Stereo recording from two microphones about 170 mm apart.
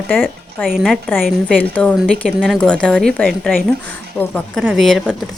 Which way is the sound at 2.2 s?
Centre (ahead or behind).